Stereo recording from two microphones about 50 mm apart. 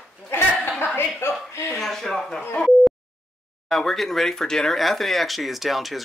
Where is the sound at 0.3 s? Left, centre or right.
Left.